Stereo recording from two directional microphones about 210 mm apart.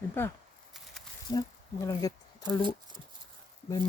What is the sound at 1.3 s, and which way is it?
Speech, 15° left (ahead or behind).